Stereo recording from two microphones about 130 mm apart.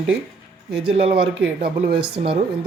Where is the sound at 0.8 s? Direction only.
45° right (ahead or behind).